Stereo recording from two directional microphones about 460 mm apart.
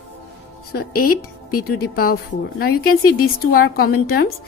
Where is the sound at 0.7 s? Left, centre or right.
Centre.